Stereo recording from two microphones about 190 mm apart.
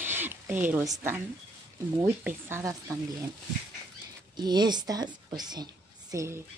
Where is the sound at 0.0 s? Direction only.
10° right (ahead or behind).